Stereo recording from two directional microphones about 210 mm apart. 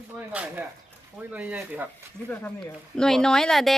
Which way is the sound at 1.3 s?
5° right (ahead or behind).